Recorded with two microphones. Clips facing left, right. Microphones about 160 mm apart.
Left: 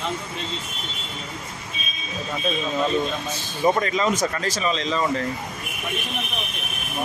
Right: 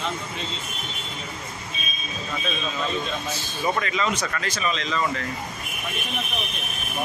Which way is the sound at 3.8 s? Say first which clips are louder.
Left 4 dB; 40° left (ahead or behind).